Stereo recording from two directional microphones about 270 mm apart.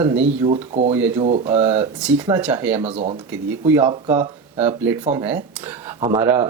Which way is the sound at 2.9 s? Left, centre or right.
Right.